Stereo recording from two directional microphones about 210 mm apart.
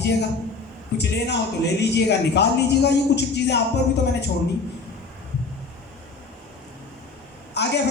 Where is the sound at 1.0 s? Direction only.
55° left (ahead or behind).